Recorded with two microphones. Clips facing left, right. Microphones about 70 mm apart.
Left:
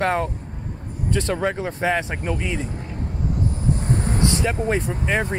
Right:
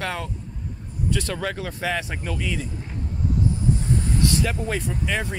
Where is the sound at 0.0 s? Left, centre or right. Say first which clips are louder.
Left 8 dB; left.